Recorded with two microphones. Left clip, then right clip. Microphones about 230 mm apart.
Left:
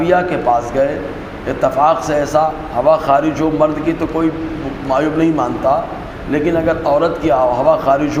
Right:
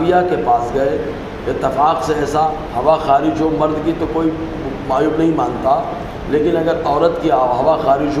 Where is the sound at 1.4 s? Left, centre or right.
Left.